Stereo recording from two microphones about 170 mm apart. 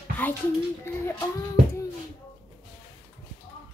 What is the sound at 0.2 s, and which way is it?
Speech, 10° left (ahead or behind).